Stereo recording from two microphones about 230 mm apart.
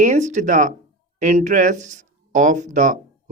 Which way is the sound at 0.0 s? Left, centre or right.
Right.